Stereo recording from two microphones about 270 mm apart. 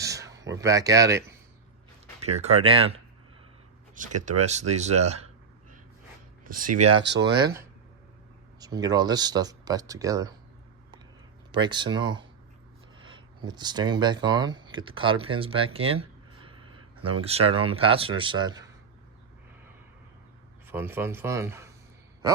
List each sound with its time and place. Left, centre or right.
0.0 s speech: centre
2.2 s speech: right
6.4 s a sound: right
7.0 s speech: right
8.6 s speech: centre
11.5 s speech: centre
17.0 s speech: right
17.2 s speech: right
20.7 s speech: centre